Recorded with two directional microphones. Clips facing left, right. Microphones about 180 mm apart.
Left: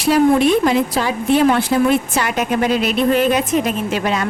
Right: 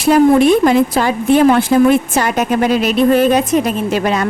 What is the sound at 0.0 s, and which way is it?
Speech, 50° right (ahead or behind).